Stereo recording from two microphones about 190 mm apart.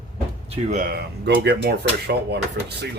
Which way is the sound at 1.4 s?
60° right (ahead or behind).